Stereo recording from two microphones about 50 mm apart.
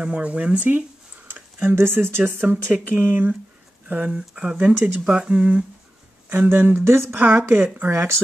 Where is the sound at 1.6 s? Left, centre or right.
Right.